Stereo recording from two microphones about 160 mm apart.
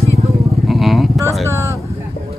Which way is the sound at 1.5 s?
20° right (ahead or behind).